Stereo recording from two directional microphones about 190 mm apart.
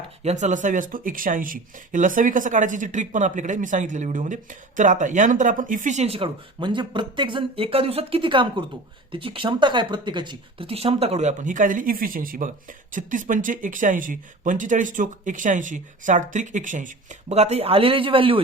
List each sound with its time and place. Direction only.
0.2 s speech: 35° right (ahead or behind)